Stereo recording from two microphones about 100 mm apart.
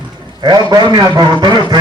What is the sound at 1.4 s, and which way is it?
Speech, 50° right (ahead or behind).